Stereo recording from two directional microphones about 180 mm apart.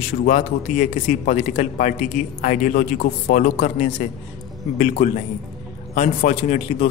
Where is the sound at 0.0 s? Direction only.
40° left (ahead or behind).